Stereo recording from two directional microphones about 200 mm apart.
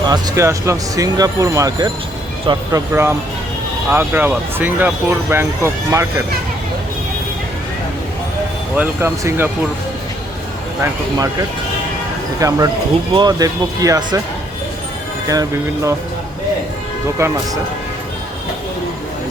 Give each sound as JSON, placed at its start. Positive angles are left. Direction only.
{"t": 0.1, "sound": "speech", "side_deg": -15}
{"t": 8.7, "sound": "speech", "side_deg": -10}
{"t": 12.4, "sound": "speech", "side_deg": -15}
{"t": 15.3, "sound": "speech", "side_deg": -15}
{"t": 17.2, "sound": "speech", "side_deg": -15}